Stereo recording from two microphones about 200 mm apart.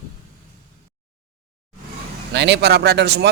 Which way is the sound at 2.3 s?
60° right (ahead or behind).